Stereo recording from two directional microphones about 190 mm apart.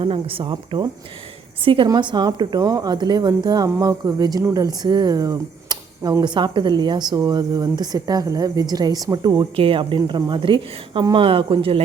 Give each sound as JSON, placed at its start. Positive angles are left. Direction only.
{"t": 0.0, "sound": "a woman's voice", "side_deg": -30}